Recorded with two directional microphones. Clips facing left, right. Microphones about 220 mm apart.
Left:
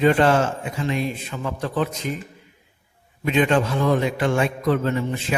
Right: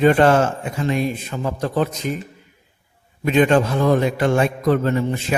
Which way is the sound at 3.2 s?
45° right (ahead or behind).